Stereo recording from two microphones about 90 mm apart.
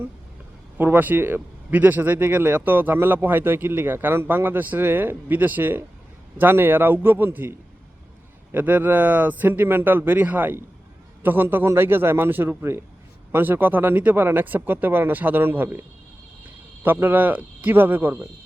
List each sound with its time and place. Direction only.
0.8 s speech: 20° right (ahead or behind)
8.5 s speech: 20° right (ahead or behind)
16.8 s speech: 20° right (ahead or behind)